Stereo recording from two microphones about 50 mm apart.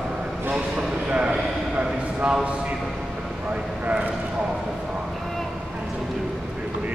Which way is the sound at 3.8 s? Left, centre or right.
Right.